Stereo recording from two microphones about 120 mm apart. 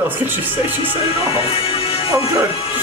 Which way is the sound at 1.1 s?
50° left (ahead or behind).